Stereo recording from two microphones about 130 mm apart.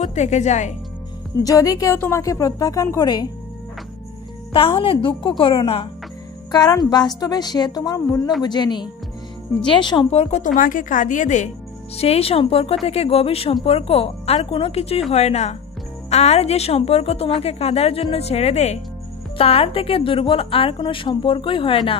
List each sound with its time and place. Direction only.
0.0 s a woman's voice: 60° left (ahead or behind)
1.4 s a woman's voice: 25° left (ahead or behind)
4.7 s a woman's voice: 40° left (ahead or behind)
6.5 s a woman's voice: 30° left (ahead or behind)
10.1 s speech: 65° left (ahead or behind)
12.0 s a woman's voice: 50° left (ahead or behind)